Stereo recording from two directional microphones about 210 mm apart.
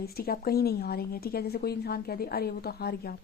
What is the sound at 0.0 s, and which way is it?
A woman's voice, 45° left (ahead or behind).